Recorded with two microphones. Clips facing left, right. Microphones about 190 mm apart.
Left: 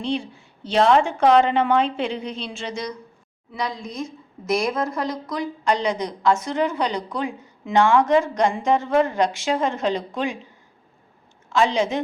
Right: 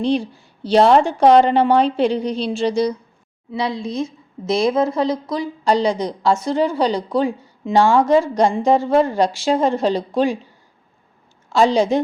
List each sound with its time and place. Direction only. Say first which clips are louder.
0.0 s a woman's voice: right 7 dB; 35° right (ahead or behind)
11.4 s a woman's voice: right 5 dB; 35° right (ahead or behind)